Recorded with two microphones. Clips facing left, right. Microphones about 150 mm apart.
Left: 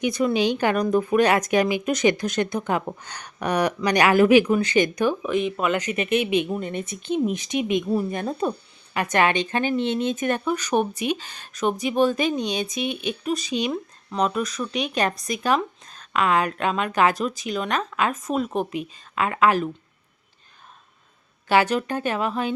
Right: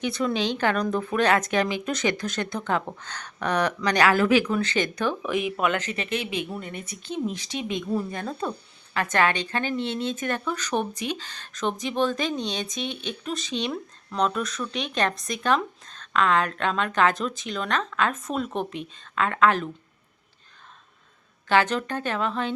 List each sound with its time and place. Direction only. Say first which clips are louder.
0.0 s a woman's voice: left 4 dB; 15° left (ahead or behind)
5.2 s speech: left 2 dB; 5° right (ahead or behind)
5.7 s a woman's voice: left 6 dB; 15° left (ahead or behind)
21.5 s a woman's voice: left 2 dB; 10° left (ahead or behind)